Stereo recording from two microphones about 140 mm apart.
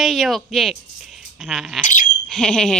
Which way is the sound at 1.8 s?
65° left (ahead or behind).